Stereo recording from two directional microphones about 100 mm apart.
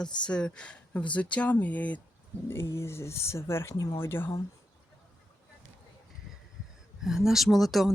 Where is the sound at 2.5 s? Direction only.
25° left (ahead or behind).